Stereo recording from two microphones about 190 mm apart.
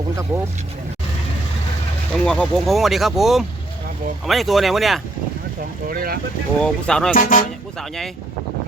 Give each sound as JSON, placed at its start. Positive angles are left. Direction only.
{"t": 2.1, "sound": "speech", "side_deg": 5}
{"t": 5.9, "sound": "speech", "side_deg": -50}
{"t": 6.6, "sound": "speech", "side_deg": 5}
{"t": 7.1, "sound": "speech", "side_deg": 45}
{"t": 7.8, "sound": "speech", "side_deg": 0}